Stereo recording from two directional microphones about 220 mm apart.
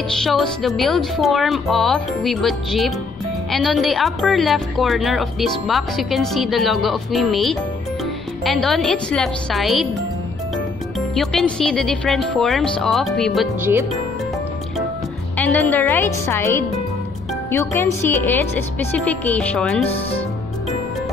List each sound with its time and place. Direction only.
0.2 s a woman's voice: centre (ahead or behind)
11.1 s speech: centre (ahead or behind)
15.3 s a woman's voice: 10° left (ahead or behind)
19.9 s speech: 25° left (ahead or behind)